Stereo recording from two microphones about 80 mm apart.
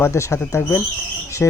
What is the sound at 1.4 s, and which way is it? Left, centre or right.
Speech, left.